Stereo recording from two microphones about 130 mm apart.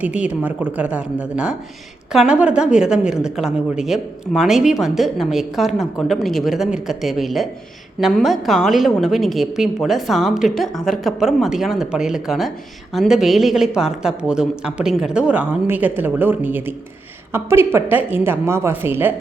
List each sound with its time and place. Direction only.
0.0 s a woman's voice: 10° right (ahead or behind)